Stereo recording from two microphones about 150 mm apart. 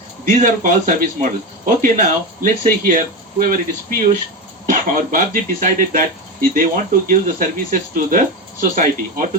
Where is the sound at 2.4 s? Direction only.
60° right (ahead or behind).